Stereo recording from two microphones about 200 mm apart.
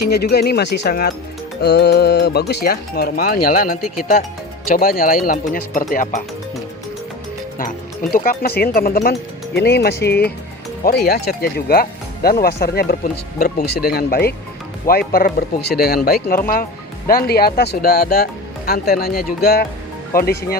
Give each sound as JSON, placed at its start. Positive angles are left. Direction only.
{"t": 0.1, "sound": "speech", "side_deg": 55}
{"t": 8.1, "sound": "speech", "side_deg": 45}